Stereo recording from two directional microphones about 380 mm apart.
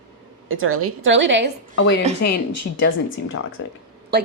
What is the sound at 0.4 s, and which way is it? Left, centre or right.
A woman's voice, right.